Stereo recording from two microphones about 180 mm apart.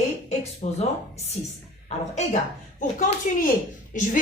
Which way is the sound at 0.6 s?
35° left (ahead or behind).